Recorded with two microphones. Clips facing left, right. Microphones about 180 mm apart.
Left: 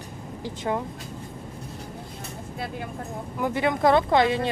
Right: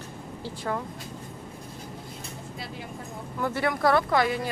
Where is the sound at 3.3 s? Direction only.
15° left (ahead or behind).